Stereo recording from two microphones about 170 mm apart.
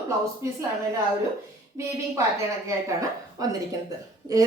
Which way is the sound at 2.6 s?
20° right (ahead or behind).